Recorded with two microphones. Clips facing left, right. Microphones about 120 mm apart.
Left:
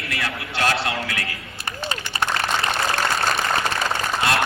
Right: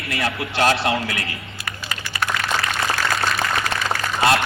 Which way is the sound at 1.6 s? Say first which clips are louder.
Left 4 dB; 30° left (ahead or behind).